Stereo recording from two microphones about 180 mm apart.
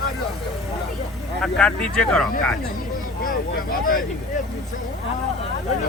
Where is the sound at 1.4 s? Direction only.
5° left (ahead or behind).